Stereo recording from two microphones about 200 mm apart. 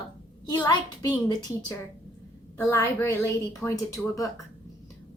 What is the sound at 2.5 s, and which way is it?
A woman's voice, 15° left (ahead or behind).